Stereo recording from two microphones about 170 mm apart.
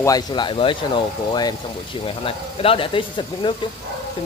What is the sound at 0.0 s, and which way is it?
Speech, 25° left (ahead or behind).